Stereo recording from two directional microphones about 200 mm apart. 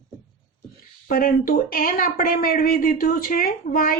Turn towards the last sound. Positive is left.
turn(degrees=45)  # may be behind; listen again after turning